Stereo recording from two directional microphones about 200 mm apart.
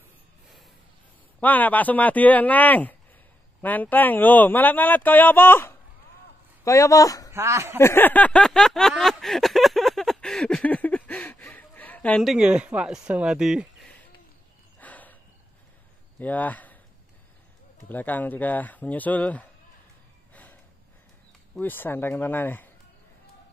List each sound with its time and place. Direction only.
1.4 s speech: 10° left (ahead or behind)
7.3 s speech: 15° right (ahead or behind)
7.8 s a sound: 10° left (ahead or behind)
16.2 s speech: 10° left (ahead or behind)
17.8 s speech: 10° left (ahead or behind)
21.5 s speech: 10° left (ahead or behind)